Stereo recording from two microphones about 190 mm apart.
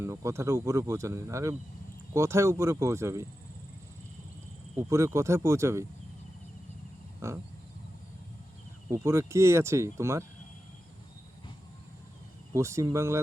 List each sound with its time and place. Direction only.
0.0 s speech: 15° right (ahead or behind)
4.8 s speech: 15° right (ahead or behind)
7.2 s speech: 15° right (ahead or behind)
8.9 s speech: 15° right (ahead or behind)
12.5 s speech: 15° right (ahead or behind)